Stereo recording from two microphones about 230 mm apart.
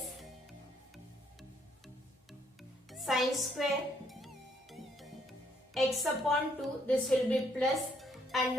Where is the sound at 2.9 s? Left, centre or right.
Centre.